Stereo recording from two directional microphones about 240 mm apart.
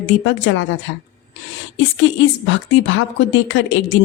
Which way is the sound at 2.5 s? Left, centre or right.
Left.